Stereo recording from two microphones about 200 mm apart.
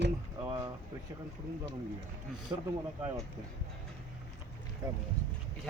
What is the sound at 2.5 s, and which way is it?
Speech, 15° right (ahead or behind).